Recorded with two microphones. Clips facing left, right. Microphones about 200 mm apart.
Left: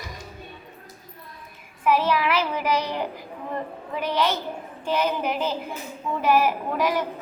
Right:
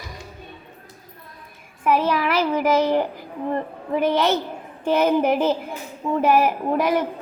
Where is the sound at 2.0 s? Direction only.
45° right (ahead or behind).